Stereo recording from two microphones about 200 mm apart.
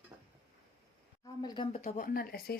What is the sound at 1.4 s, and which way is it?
Speech, 20° left (ahead or behind).